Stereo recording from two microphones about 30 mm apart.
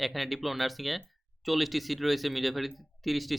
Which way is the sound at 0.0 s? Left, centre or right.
Centre.